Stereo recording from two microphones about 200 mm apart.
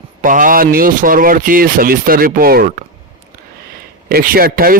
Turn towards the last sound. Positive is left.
turn(degrees=-45)  # may be behind; listen again after turning